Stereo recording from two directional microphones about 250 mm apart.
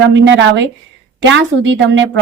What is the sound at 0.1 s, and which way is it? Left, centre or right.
Speech, right.